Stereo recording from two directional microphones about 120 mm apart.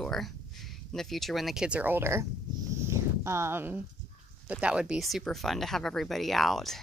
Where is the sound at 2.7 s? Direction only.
25° right (ahead or behind).